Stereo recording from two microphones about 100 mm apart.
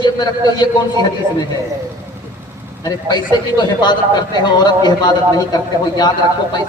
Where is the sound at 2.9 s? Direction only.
45° left (ahead or behind).